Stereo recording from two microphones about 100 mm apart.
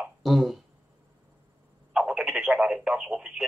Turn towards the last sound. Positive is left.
turn(degrees=-5)  # may be behind; listen again after turning